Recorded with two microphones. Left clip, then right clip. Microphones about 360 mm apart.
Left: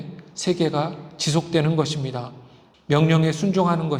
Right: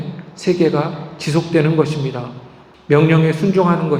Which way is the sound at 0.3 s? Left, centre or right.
Left.